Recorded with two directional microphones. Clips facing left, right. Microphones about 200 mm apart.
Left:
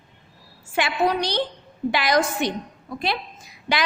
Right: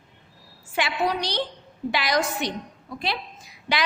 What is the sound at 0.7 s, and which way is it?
A woman's voice, 50° left (ahead or behind).